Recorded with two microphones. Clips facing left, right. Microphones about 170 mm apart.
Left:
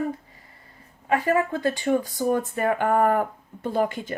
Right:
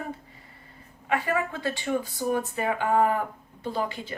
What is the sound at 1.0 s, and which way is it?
Speech, 40° left (ahead or behind).